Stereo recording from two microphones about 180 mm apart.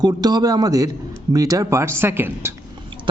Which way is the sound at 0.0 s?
20° right (ahead or behind).